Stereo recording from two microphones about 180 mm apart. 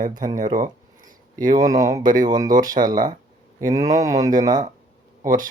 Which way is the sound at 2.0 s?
50° right (ahead or behind).